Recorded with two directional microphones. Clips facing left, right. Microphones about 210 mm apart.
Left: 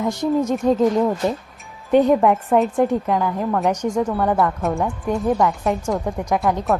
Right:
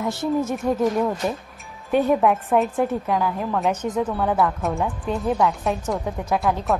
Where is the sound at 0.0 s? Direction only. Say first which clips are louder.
Left 3 dB; 15° left (ahead or behind).